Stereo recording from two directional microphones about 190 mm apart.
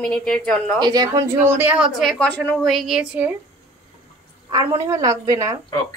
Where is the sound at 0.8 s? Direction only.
20° right (ahead or behind); by 3.3 s 5° right (ahead or behind).